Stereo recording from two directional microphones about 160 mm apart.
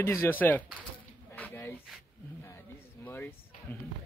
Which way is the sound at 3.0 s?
10° left (ahead or behind).